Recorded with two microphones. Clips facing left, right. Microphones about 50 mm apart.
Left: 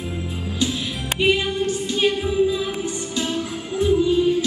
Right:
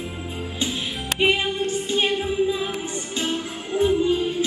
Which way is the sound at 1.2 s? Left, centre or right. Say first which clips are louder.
Left 2 dB; right.